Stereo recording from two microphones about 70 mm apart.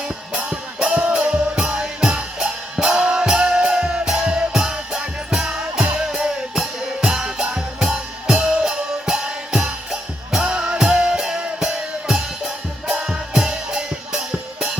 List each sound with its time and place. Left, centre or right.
0.3 s music: centre